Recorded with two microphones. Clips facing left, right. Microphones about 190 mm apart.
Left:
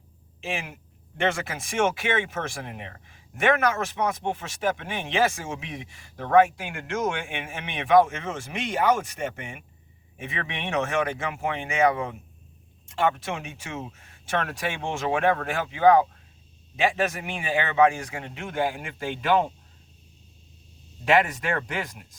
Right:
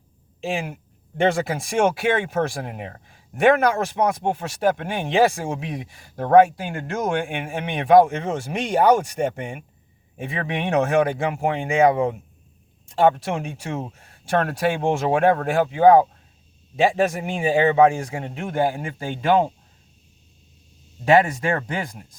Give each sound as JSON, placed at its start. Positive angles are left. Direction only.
{"t": 0.4, "sound": "speech", "side_deg": -35}
{"t": 21.0, "sound": "speech", "side_deg": -30}